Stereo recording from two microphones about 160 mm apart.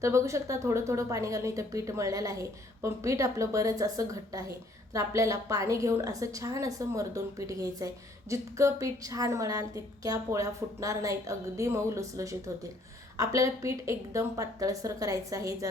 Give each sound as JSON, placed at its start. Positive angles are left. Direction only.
{"t": 0.0, "sound": "a woman's voice", "side_deg": -20}